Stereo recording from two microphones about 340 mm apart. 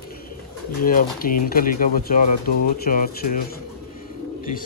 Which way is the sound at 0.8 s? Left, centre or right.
Left.